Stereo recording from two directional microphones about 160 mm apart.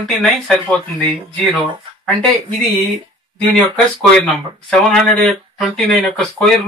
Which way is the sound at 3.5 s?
5° left (ahead or behind).